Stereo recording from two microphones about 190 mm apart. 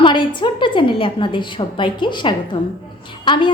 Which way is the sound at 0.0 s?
25° left (ahead or behind).